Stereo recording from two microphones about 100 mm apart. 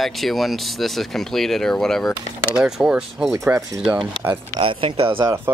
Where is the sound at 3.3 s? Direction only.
20° right (ahead or behind).